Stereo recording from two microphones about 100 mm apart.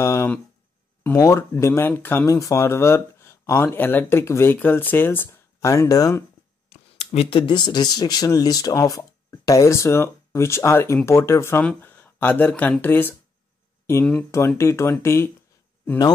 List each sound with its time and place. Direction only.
0.0 s a sound: 30° left (ahead or behind)
1.1 s speech: 30° left (ahead or behind)
5.6 s speech: 35° left (ahead or behind)
6.7 s speech: 90° left; by 13.1 s 20° left (ahead or behind)
14.6 s speech: 30° left (ahead or behind)